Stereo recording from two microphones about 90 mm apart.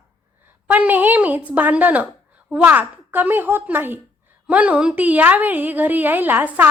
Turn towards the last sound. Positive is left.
turn(degrees=-20)  # may be behind; listen again after turning